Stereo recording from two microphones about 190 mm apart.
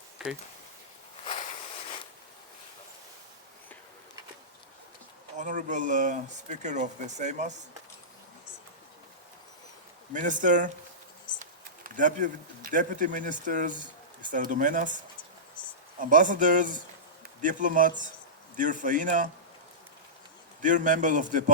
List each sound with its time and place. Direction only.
0.2 s speech: centre (ahead or behind)
1.2 s a sound: 40° left (ahead or behind)
5.4 s speech: 40° right (ahead or behind)
10.1 s speech: 40° right (ahead or behind)
16.0 s speech: 45° right (ahead or behind)
20.6 s speech: 40° right (ahead or behind)